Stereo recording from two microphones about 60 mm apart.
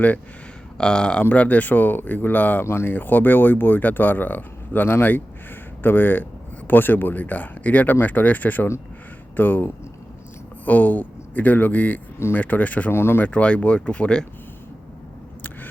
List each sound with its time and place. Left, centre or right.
0.8 s speech: centre
1.2 s speech: left
2.6 s speech: left
2.9 s speech: left
12.9 s speech: left
13.2 s speech: left
15.4 s a sound: left